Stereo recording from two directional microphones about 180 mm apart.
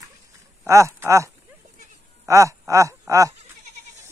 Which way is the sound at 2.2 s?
15° right (ahead or behind).